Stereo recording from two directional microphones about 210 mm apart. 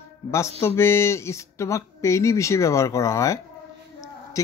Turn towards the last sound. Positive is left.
turn(degrees=15)  # may be behind; listen again after turning